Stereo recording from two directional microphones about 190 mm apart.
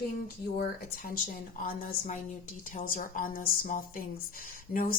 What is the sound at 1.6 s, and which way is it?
A woman's voice, 40° left (ahead or behind).